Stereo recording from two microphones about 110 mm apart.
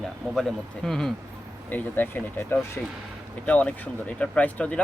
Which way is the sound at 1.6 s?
15° left (ahead or behind).